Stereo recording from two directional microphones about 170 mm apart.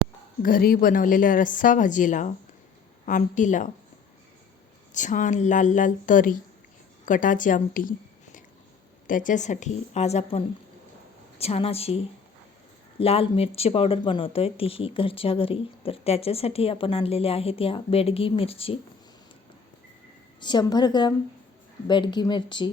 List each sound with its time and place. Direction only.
0.4 s a woman's voice: 60° left (ahead or behind)
4.9 s a woman's voice: 45° left (ahead or behind)
13.0 s speech: 35° left (ahead or behind)
20.4 s speech: 25° left (ahead or behind)